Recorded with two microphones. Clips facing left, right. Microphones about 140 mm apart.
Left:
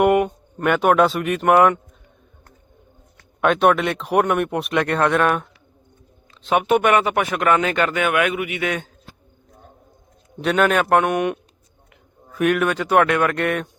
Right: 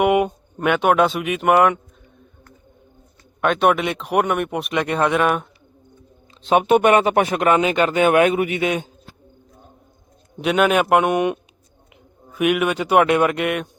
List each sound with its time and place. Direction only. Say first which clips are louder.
0.0 s speech: left 1 dB; 10° right (ahead or behind)
3.4 s speech: left 1 dB; centre (ahead or behind)
6.5 s speech: right 2 dB; 25° right (ahead or behind)
8.6 s speech: right 3 dB; 20° right (ahead or behind)
10.4 s speech: right 1 dB; 10° right (ahead or behind)
13.3 s speech: even; 5° right (ahead or behind)